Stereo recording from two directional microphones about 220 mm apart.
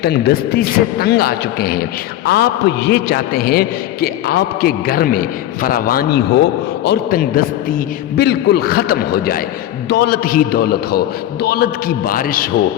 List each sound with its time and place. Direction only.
0.0 s a man's voice: 45° left (ahead or behind)